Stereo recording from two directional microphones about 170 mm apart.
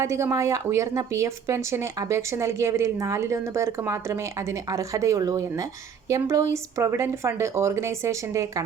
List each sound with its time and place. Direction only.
0.0 s a woman's voice: 15° right (ahead or behind)